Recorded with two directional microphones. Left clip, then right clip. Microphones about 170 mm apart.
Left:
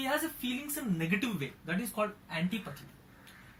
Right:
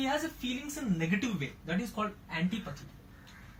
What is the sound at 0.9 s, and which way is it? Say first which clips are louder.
Speech: even; 15° left (ahead or behind).